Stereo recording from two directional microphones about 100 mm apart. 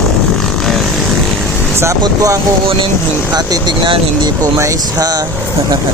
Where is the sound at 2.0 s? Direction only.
35° right (ahead or behind).